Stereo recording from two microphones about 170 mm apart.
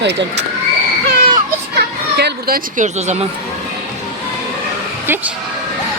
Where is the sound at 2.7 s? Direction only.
45° right (ahead or behind).